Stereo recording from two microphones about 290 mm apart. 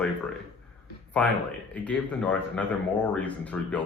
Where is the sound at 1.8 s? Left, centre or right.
Centre.